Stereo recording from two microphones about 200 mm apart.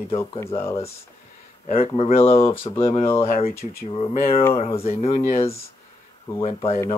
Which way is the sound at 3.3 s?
30° left (ahead or behind).